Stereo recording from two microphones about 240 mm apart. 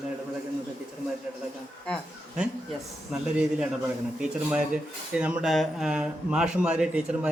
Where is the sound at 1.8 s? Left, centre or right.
Centre.